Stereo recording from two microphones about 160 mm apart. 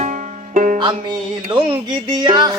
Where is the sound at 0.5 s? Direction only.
50° right (ahead or behind).